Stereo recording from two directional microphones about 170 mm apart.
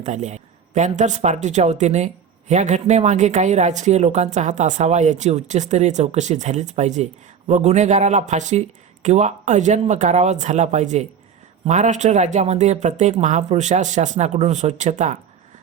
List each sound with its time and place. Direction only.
0.0 s speech: 45° right (ahead or behind)